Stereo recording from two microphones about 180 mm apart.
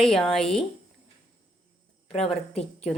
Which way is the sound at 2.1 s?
35° left (ahead or behind).